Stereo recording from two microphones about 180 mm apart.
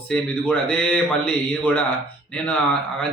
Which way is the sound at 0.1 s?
5° left (ahead or behind).